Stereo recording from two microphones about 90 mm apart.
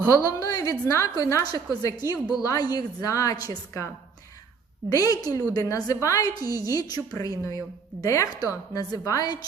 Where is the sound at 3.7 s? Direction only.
30° left (ahead or behind); by 9.5 s 45° left (ahead or behind).